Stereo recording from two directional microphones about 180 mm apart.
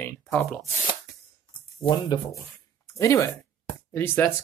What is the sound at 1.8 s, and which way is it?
Speech, 25° left (ahead or behind).